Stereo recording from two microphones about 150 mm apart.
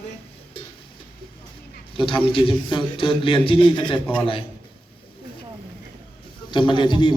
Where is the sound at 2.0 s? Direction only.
35° left (ahead or behind).